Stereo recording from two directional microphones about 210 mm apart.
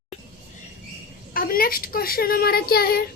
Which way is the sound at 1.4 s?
45° left (ahead or behind).